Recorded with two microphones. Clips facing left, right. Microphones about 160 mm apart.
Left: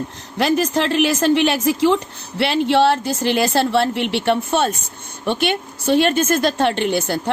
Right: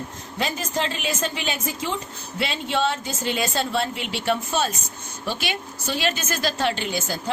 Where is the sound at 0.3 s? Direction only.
75° left (ahead or behind).